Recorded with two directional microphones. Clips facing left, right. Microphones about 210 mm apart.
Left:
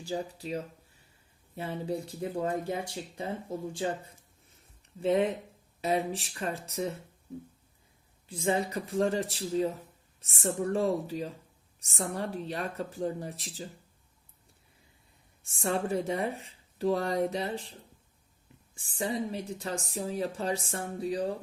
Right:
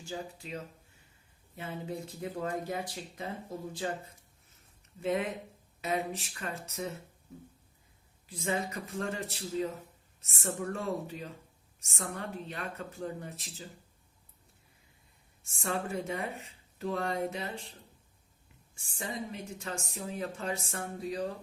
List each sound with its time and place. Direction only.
0.0 s speech: 35° left (ahead or behind)
4.9 s speech: 30° left (ahead or behind)
8.3 s speech: 30° left (ahead or behind)
15.4 s speech: 30° left (ahead or behind)
18.7 s speech: 35° left (ahead or behind)